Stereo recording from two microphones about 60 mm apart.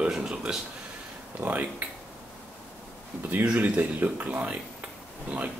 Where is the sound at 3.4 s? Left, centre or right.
Right.